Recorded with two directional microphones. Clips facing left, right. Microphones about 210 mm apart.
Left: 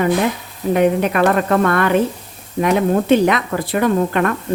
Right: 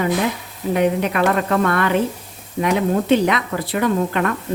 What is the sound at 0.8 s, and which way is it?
Speech, 50° left (ahead or behind).